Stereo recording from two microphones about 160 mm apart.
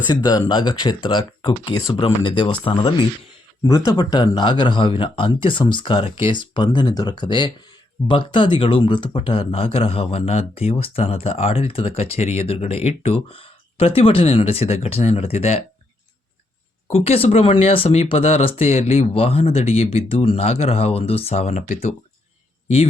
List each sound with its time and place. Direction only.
0.1 s speech: 25° left (ahead or behind); by 15.6 s 40° left (ahead or behind)
16.9 s speech: 40° left (ahead or behind)